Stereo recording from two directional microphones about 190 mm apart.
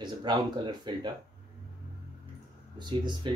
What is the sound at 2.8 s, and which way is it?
Speech, 25° right (ahead or behind).